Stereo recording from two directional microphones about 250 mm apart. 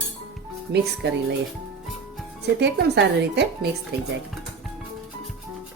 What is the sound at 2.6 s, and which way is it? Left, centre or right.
Speech, right.